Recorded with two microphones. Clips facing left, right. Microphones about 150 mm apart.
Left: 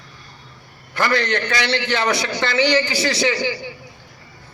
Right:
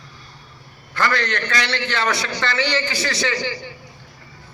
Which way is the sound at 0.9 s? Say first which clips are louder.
Left 2 dB; 15° left (ahead or behind).